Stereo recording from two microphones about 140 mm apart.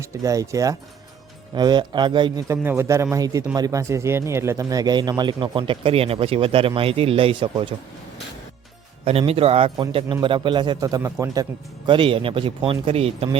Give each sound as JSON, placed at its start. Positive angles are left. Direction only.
{"t": 0.0, "sound": "speech", "side_deg": -20}
{"t": 2.5, "sound": "speech", "side_deg": -20}
{"t": 9.0, "sound": "speech", "side_deg": -45}
{"t": 10.8, "sound": "speech", "side_deg": -25}
{"t": 11.9, "sound": "speech", "side_deg": -35}